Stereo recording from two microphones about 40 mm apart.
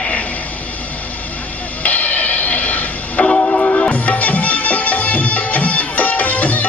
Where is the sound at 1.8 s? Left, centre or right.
Left.